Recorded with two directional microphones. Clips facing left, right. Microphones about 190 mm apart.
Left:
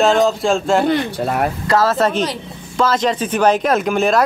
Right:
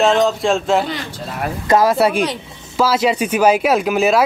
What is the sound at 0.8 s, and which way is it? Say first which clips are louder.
Speech: left 9 dB; 60° left (ahead or behind).